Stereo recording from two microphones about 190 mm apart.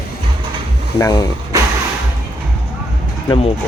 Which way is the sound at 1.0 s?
20° left (ahead or behind).